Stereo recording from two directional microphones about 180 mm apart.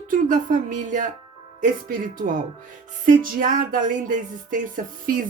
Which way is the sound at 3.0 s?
50° right (ahead or behind).